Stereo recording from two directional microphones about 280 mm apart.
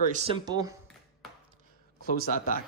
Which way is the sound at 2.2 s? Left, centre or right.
Left.